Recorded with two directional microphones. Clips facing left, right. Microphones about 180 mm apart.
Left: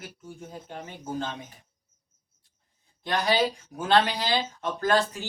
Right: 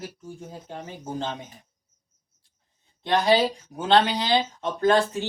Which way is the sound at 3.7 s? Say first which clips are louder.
Right 3 dB; 20° right (ahead or behind).